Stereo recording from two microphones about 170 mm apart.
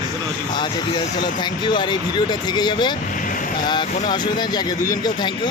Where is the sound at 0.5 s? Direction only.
25° left (ahead or behind).